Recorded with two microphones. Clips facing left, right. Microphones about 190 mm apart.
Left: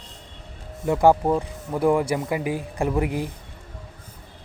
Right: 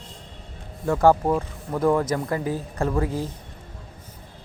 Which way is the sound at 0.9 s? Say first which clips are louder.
Left 1 dB; 15° left (ahead or behind).